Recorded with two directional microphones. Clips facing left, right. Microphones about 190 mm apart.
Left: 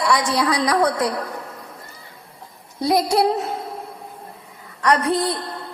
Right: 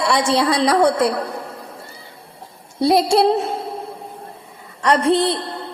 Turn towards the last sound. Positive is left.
turn(degrees=-25)  # may be behind; listen again after turning